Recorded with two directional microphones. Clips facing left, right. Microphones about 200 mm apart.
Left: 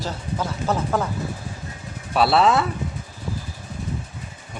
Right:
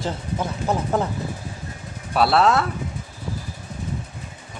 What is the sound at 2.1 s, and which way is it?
Speech, centre (ahead or behind).